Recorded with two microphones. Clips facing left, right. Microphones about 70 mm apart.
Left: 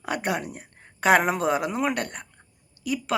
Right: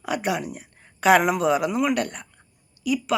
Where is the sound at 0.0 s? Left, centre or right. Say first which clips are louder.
Right 2 dB; left.